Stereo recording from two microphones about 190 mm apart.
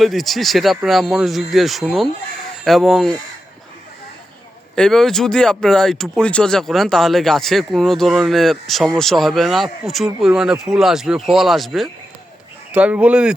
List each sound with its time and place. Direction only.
0.0 s speech: centre (ahead or behind)
4.7 s speech: 5° left (ahead or behind)